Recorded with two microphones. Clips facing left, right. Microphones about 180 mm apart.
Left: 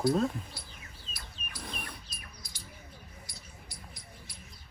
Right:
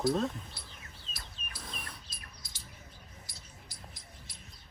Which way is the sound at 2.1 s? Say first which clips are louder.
Left 3 dB; 25° right (ahead or behind).